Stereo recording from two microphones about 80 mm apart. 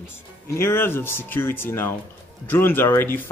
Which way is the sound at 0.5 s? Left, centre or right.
Left.